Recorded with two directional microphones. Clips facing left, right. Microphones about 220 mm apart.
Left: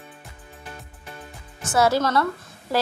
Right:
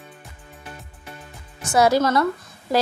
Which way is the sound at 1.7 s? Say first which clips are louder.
Right 3 dB; 15° right (ahead or behind).